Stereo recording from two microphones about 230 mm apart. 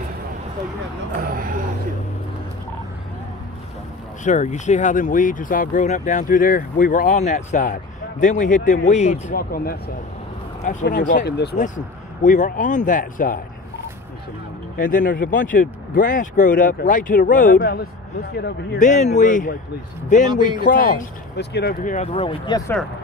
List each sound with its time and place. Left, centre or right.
1.2 s a sound: right
4.2 s speech: left
11.5 s speech: left
14.8 s speech: left
18.3 s speech: left
18.9 s speech: left